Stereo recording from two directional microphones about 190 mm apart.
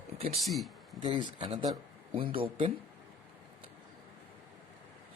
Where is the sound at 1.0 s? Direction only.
30° right (ahead or behind).